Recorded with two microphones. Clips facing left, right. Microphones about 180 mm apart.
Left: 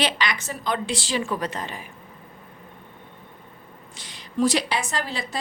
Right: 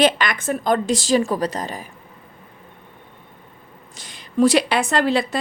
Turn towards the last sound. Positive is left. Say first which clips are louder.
# right 9 dB
turn(degrees=-65)  # may be behind; listen again after turning